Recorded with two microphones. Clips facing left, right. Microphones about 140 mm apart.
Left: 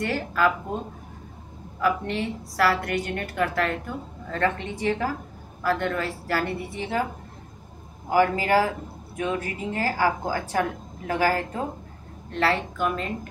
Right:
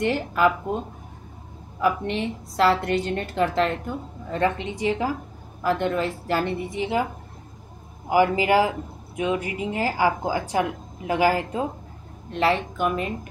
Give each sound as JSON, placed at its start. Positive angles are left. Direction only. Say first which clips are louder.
{"t": 0.0, "sound": "a woman's voice", "louder": "right 3 dB", "side_deg": -20}
{"t": 1.8, "sound": "a woman's voice", "louder": "right 1 dB", "side_deg": -20}
{"t": 8.1, "sound": "speech", "louder": "right 2 dB", "side_deg": -15}